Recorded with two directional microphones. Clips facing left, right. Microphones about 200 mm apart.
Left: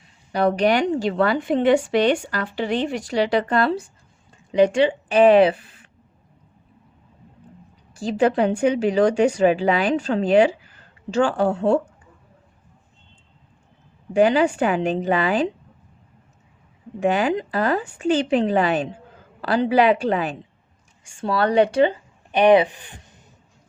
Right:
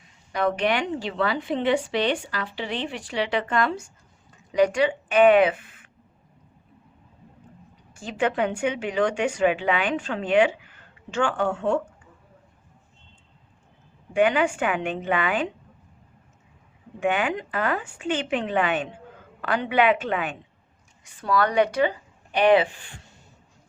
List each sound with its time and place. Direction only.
0.3 s a woman's voice: 35° left (ahead or behind)
7.9 s speech: 35° left (ahead or behind)
14.1 s speech: 35° left (ahead or behind)
17.0 s speech: 35° left (ahead or behind); by 23.2 s 20° left (ahead or behind)